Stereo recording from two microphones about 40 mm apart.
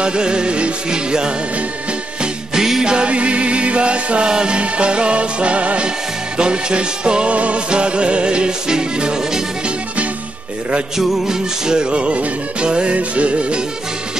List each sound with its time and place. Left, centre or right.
0.0 s music: right
2.5 s music: centre
3.1 s music: right
11.0 s music: centre